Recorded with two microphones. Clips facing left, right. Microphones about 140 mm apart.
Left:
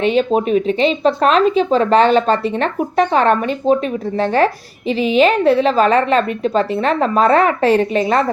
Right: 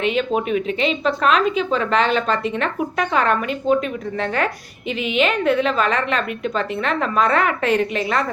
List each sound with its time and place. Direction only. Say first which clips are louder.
0.0 s speech: left 5 dB; 30° left (ahead or behind)
4.9 s speech: left 7 dB; 35° left (ahead or behind)